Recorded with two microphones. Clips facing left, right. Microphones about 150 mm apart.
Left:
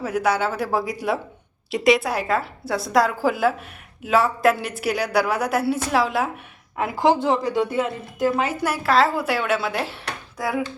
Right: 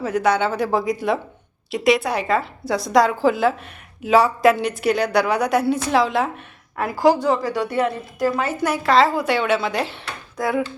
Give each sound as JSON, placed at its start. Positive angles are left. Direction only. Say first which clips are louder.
{"t": 0.0, "sound": "a woman's voice", "louder": "right 2 dB", "side_deg": 5}
{"t": 7.0, "sound": "speech", "louder": "right 2 dB", "side_deg": 25}
{"t": 8.6, "sound": "a woman's voice", "louder": "right 3 dB", "side_deg": 5}